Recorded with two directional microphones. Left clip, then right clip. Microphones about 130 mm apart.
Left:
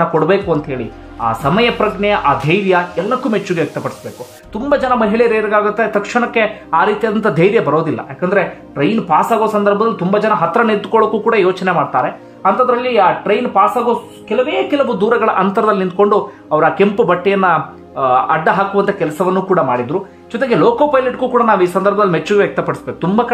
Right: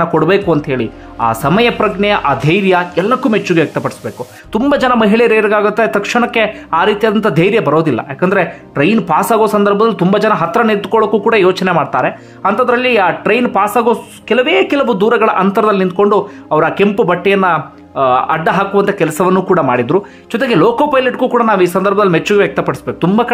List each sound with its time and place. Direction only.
0.0 s speech: 35° right (ahead or behind)
4.6 s speech: 45° right (ahead or behind); by 19.0 s 20° right (ahead or behind)
19.1 s speech: 30° right (ahead or behind)